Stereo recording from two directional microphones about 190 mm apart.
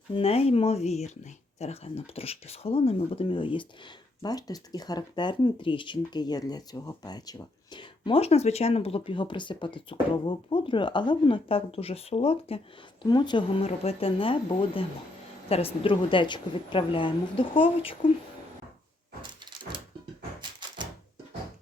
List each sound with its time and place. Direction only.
0.1 s speech: 30° left (ahead or behind)
15.4 s speech: 30° left (ahead or behind)